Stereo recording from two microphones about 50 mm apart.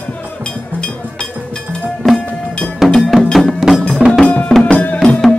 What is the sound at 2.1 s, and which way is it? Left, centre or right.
Music, left.